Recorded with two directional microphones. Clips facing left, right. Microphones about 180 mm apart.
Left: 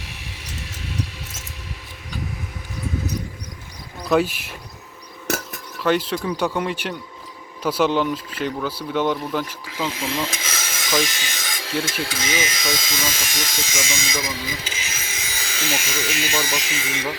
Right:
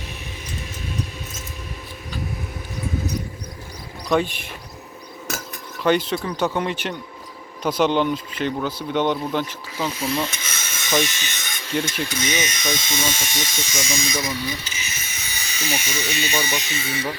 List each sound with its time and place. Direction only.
0.0 s a sound: 85° left
4.1 s speech: 5° left (ahead or behind)
5.8 s speech: 5° left (ahead or behind)
9.6 s speech: 90° left